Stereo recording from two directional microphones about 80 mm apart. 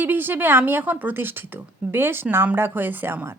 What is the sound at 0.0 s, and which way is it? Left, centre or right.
A woman's voice, right.